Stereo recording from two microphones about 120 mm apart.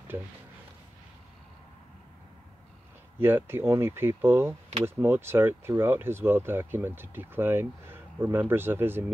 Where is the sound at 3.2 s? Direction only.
20° right (ahead or behind).